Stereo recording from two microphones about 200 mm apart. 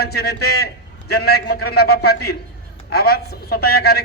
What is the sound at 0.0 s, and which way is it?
A man's voice, 50° left (ahead or behind).